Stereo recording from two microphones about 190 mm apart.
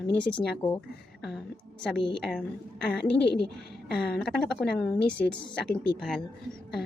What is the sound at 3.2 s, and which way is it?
Speech, 65° left (ahead or behind).